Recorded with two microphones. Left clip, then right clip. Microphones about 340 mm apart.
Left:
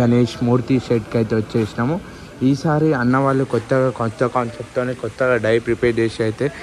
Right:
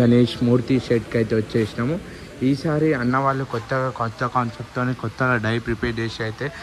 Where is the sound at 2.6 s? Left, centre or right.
Left.